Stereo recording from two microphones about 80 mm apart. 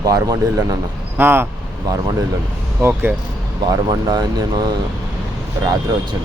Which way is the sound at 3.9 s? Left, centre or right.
Right.